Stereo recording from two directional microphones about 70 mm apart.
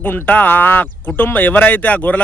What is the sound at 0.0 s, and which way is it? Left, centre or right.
Speech, left.